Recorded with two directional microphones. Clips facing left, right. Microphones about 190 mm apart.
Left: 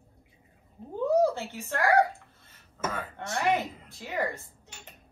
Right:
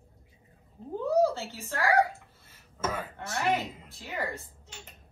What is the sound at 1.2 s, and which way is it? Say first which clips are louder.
Speech: even; 15° left (ahead or behind).